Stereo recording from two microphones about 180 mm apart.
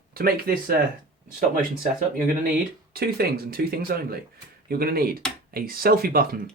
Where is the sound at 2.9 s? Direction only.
60° right (ahead or behind).